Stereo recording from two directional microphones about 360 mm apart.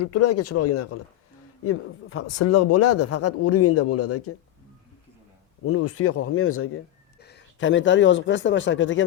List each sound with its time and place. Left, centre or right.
0.0 s speech: left
5.6 s speech: left